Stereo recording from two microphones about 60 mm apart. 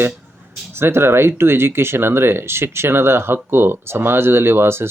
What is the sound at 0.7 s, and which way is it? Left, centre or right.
Speech, right.